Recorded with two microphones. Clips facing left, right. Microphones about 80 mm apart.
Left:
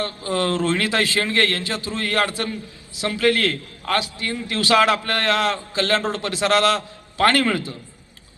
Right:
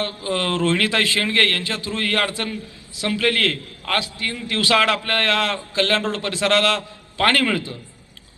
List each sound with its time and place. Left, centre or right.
0.0 s a man's voice: left